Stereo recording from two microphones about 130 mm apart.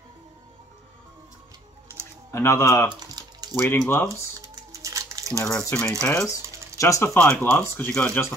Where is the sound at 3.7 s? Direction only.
15° left (ahead or behind).